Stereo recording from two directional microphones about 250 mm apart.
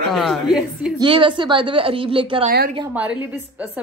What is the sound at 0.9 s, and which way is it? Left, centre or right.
A woman's voice, centre.